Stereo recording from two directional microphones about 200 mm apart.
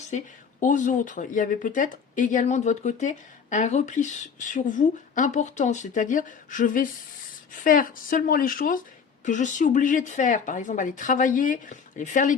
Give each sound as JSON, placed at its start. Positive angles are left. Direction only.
{"t": 0.6, "sound": "speech", "side_deg": 40}